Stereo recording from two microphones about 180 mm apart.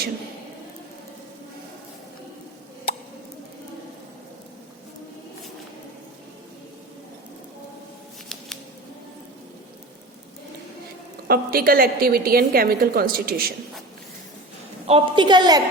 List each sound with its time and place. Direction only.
11.3 s a woman's voice: 55° right (ahead or behind)
14.8 s a woman's voice: 30° right (ahead or behind)